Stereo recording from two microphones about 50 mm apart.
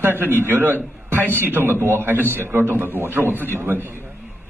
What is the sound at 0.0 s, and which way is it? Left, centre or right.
Speech, right.